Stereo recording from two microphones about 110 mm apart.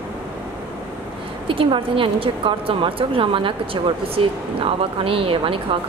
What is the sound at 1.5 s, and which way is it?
A woman's voice, 55° right (ahead or behind).